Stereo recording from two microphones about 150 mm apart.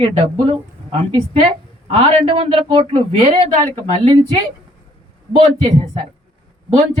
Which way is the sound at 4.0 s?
45° right (ahead or behind).